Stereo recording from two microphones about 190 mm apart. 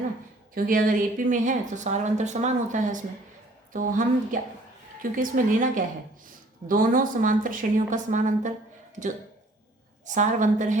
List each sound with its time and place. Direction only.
0.5 s a woman's voice: 45° right (ahead or behind)
10.1 s a woman's voice: 40° right (ahead or behind)